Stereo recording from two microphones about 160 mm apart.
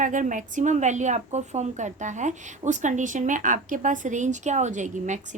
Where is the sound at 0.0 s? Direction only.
55° right (ahead or behind).